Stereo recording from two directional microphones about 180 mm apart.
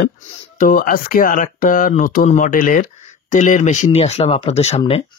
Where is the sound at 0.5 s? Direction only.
50° left (ahead or behind); by 5.0 s 35° left (ahead or behind).